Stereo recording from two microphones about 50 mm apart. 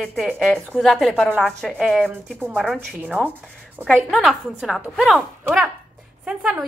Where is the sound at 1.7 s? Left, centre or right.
Centre.